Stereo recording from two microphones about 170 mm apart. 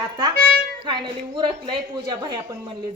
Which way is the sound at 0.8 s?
30° right (ahead or behind).